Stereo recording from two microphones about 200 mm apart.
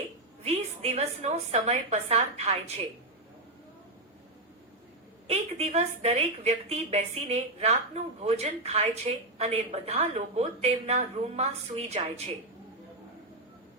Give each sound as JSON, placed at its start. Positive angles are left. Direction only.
{"t": 0.4, "sound": "a woman's voice", "side_deg": -30}
{"t": 5.3, "sound": "a woman's voice", "side_deg": -35}